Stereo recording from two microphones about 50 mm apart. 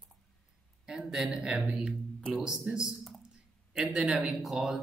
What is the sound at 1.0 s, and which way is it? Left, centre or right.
A man's voice, centre.